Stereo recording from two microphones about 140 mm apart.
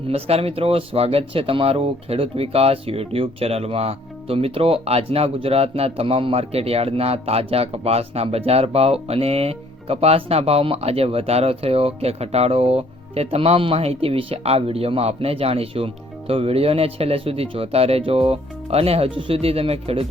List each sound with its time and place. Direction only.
0.1 s speech: 45° right (ahead or behind)